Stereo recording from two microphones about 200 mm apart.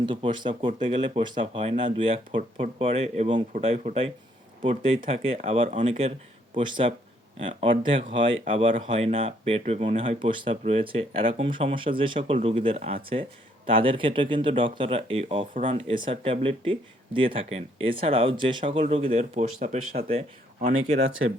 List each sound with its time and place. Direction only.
0.0 s speech: 25° right (ahead or behind)